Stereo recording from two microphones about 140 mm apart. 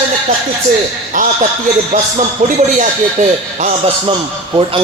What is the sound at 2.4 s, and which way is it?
Speech, 75° right (ahead or behind).